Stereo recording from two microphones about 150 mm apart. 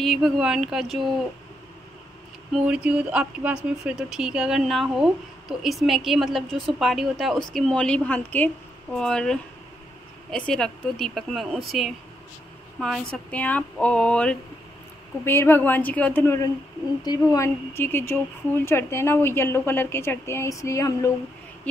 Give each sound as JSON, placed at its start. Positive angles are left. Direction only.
{"t": 0.0, "sound": "speech", "side_deg": 0}
{"t": 2.5, "sound": "speech", "side_deg": -5}